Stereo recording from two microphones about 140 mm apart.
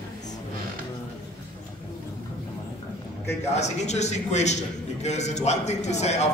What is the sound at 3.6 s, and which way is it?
A man's voice, 55° left (ahead or behind).